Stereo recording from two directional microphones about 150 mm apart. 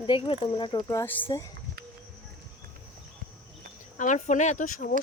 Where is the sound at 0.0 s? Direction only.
35° left (ahead or behind); by 1.5 s 15° left (ahead or behind).